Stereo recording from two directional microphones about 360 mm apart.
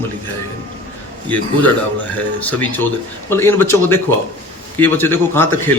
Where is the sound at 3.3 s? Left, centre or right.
Centre.